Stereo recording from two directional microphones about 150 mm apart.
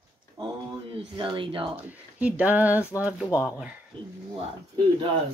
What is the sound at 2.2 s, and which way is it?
Speech, 10° right (ahead or behind).